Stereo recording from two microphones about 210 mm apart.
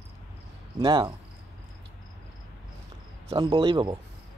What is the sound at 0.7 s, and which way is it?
Speech, 20° right (ahead or behind).